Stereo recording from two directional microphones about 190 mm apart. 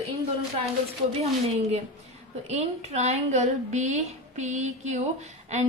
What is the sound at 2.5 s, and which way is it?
A woman's voice, 35° right (ahead or behind).